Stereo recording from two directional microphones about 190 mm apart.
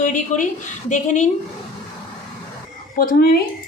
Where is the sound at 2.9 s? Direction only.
50° left (ahead or behind).